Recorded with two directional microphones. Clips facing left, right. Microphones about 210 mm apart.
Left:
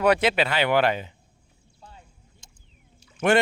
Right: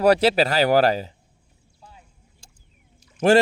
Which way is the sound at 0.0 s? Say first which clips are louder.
Right 4 dB; 35° right (ahead or behind).